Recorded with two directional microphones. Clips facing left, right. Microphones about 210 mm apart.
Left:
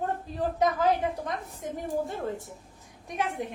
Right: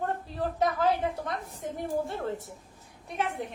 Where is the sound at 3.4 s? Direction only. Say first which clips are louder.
Left 2 dB; 15° left (ahead or behind).